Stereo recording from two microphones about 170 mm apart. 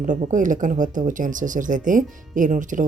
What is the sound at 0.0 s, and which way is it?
Speech, 50° right (ahead or behind).